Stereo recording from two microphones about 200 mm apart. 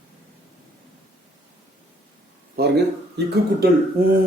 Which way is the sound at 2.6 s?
50° right (ahead or behind).